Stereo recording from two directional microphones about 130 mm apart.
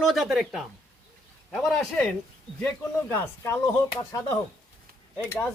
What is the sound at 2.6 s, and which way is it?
Speech, 20° left (ahead or behind).